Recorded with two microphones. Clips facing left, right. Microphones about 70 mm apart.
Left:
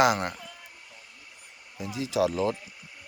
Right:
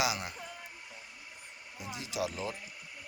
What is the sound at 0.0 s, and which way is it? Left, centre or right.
Speech, left.